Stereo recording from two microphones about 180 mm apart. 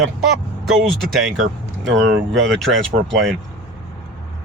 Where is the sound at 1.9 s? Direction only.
80° right.